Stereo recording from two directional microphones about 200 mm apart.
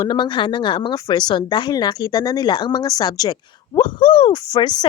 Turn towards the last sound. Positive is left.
turn(degrees=20)  # may be behind; listen again after turning